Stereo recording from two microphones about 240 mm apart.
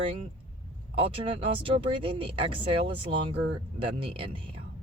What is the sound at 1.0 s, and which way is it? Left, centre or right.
Speech, right.